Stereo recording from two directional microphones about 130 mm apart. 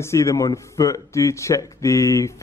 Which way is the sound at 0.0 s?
20° left (ahead or behind).